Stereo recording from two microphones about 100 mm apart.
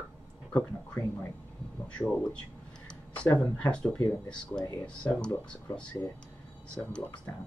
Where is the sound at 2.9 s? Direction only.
10° left (ahead or behind).